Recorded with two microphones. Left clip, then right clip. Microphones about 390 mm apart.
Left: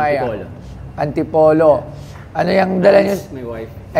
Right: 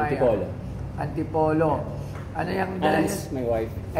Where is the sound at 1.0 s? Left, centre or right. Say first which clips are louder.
Left 12 dB; left.